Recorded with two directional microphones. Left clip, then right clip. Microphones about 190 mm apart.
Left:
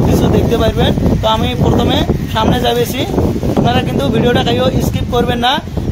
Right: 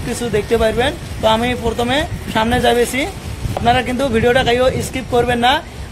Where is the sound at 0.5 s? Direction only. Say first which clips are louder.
Left 1 dB; 5° right (ahead or behind).